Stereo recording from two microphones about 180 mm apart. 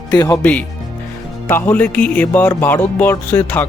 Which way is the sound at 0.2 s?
10° left (ahead or behind).